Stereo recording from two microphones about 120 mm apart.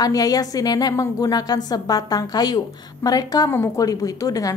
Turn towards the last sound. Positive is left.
turn(degrees=30)  # may be behind; listen again after turning